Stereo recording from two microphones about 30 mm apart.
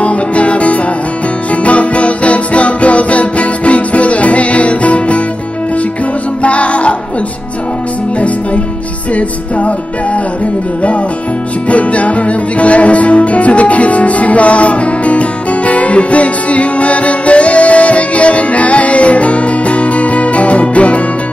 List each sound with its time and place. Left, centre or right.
0.0 s music: left
6.4 s music: left
9.1 s music: left
11.7 s music: left